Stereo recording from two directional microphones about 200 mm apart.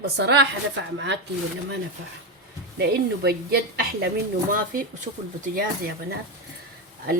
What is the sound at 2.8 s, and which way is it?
Speech, 50° right (ahead or behind).